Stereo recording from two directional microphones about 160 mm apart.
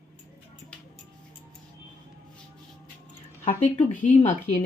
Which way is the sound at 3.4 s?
55° left (ahead or behind).